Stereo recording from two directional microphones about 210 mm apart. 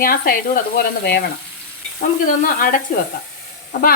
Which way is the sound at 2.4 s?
40° left (ahead or behind).